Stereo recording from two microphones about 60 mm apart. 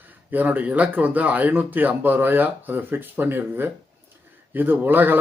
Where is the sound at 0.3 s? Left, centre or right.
Right.